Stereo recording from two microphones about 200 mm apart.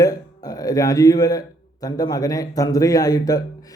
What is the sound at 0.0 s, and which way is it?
A man's voice, 20° left (ahead or behind).